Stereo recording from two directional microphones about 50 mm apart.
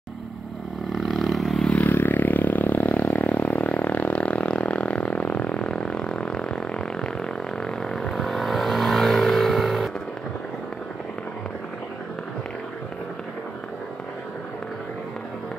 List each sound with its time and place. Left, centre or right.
0.8 s vehicle: centre
1.7 s vehicle: left
2.0 s a sound: left; by 9.8 s centre